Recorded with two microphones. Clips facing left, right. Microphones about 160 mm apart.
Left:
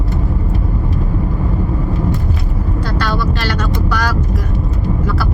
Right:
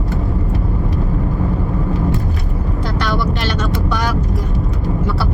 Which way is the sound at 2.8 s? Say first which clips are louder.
Even; 20° right (ahead or behind).